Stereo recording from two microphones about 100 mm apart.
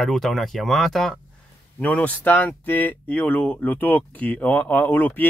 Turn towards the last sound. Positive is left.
turn(degrees=20)  # may be behind; listen again after turning